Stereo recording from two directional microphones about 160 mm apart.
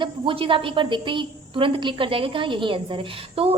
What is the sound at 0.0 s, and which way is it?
A woman's voice, 35° right (ahead or behind).